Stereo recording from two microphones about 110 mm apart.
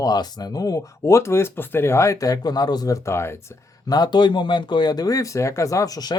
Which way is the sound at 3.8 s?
40° left (ahead or behind).